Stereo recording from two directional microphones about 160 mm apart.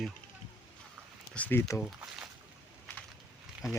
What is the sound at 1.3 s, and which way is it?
Speech, 10° left (ahead or behind).